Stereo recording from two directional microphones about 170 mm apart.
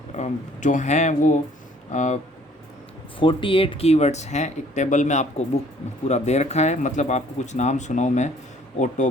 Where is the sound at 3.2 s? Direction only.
30° left (ahead or behind).